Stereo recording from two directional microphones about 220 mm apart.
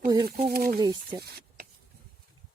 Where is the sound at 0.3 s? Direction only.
45° right (ahead or behind).